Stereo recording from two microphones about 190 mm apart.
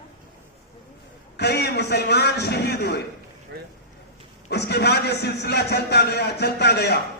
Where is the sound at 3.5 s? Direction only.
60° right (ahead or behind).